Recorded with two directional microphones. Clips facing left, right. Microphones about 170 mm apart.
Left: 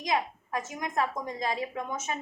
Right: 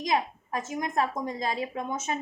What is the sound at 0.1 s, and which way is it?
A woman's voice, 35° right (ahead or behind).